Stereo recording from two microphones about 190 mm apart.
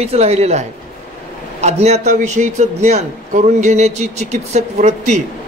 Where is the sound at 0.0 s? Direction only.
35° right (ahead or behind).